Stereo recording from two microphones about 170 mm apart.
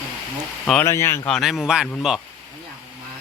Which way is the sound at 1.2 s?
Centre (ahead or behind).